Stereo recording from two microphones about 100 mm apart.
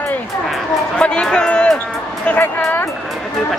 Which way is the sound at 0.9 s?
10° left (ahead or behind).